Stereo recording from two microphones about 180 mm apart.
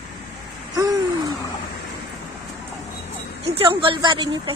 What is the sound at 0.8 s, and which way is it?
Hoot, 20° right (ahead or behind).